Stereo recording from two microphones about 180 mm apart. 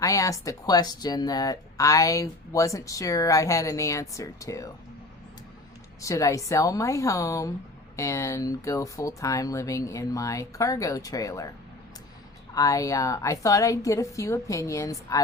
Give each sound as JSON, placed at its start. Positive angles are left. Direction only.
{"t": 0.0, "sound": "speech", "side_deg": 20}
{"t": 6.0, "sound": "speech", "side_deg": 20}
{"t": 12.5, "sound": "speech", "side_deg": 20}